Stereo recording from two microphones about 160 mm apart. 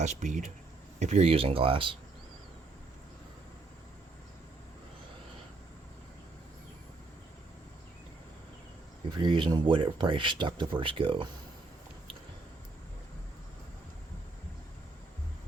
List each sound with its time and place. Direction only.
0.0 s speech: 50° right (ahead or behind); by 2.0 s 35° right (ahead or behind)
9.1 s speech: 30° right (ahead or behind)